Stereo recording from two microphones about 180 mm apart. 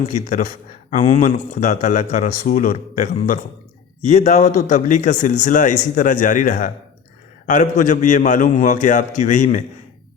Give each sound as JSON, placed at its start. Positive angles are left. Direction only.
{"t": 0.1, "sound": "a man's voice", "side_deg": 45}